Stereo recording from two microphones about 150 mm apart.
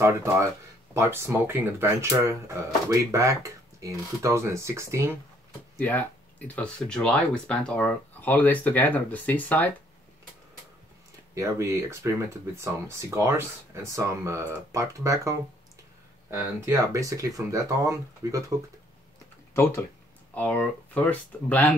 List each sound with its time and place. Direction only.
0.0 s speech: 15° right (ahead or behind)
5.8 s speech: 10° left (ahead or behind)
11.3 s speech: 20° right (ahead or behind)
16.6 s speech: 20° right (ahead or behind)
19.5 s speech: 15° left (ahead or behind)